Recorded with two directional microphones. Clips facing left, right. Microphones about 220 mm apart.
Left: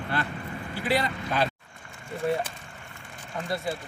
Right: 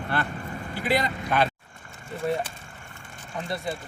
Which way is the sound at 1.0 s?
35° right (ahead or behind).